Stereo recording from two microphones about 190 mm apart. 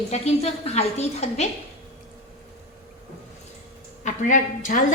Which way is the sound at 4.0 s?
40° left (ahead or behind).